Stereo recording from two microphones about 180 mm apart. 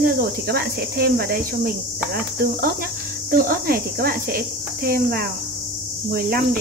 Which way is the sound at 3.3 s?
55° right (ahead or behind).